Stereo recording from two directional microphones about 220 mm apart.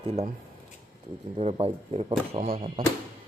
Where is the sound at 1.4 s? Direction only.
30° right (ahead or behind).